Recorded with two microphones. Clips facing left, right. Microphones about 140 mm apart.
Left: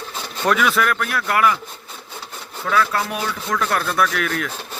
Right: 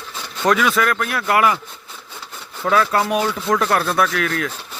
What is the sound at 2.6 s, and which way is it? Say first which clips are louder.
Speech: right 3 dB; 35° right (ahead or behind).